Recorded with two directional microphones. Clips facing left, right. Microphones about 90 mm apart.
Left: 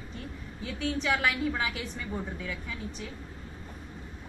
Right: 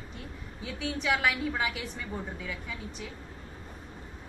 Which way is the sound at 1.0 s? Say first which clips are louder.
Right 1 dB; 5° right (ahead or behind).